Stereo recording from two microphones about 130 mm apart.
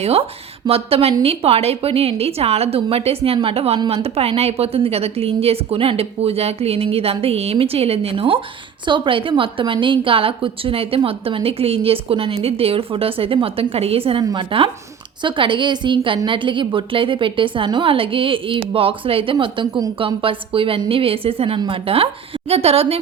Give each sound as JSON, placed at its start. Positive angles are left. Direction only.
{"t": 0.0, "sound": "a woman's voice", "side_deg": -50}